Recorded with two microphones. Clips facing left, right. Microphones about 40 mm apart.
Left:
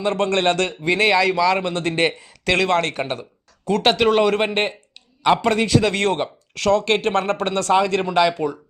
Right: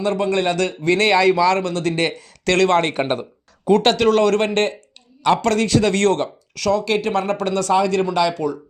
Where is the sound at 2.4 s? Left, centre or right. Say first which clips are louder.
Right 2 dB; centre.